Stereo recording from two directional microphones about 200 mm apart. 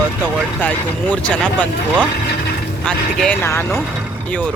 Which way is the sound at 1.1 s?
5° left (ahead or behind).